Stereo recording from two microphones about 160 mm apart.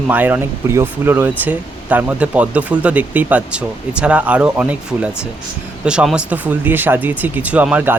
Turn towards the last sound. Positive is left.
turn(degrees=-10)  # may be behind; listen again after turning